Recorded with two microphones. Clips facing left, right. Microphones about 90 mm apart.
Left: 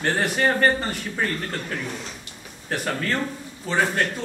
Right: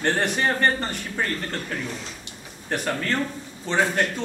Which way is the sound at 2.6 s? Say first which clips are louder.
Even; centre (ahead or behind).